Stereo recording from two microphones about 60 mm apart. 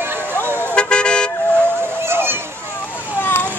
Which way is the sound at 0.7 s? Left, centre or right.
Centre.